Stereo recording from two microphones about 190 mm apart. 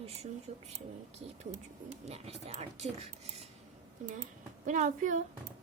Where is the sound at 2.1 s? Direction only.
35° right (ahead or behind).